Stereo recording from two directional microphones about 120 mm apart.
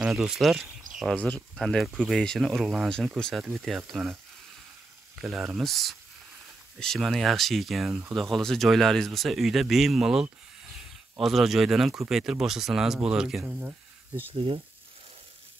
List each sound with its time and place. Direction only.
0.0 s speech: 5° right (ahead or behind)
1.1 s speech: 10° left (ahead or behind)
5.2 s speech: 5° right (ahead or behind)
13.5 s speech: 15° right (ahead or behind)
14.3 s speech: 45° right (ahead or behind)